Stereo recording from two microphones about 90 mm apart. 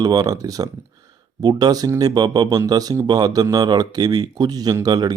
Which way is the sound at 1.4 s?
55° right (ahead or behind).